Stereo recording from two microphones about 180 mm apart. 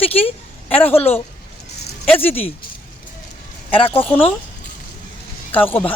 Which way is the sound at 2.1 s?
10° left (ahead or behind).